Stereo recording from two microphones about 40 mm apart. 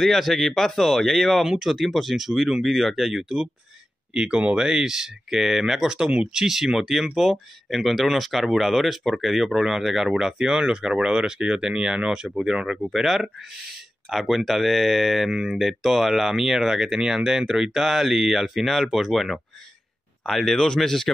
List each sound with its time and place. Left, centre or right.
0.0 s speech: centre
4.1 s speech: right
14.0 s speech: centre
20.2 s speech: centre